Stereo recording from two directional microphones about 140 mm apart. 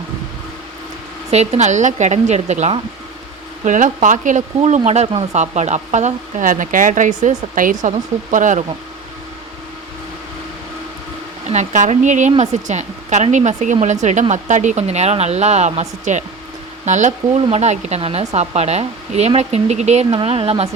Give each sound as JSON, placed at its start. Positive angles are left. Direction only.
{"t": 1.3, "sound": "speech", "side_deg": -50}
{"t": 11.4, "sound": "speech", "side_deg": -60}